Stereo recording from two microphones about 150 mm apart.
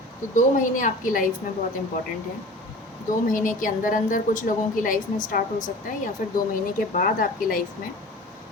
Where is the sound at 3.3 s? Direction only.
60° left (ahead or behind).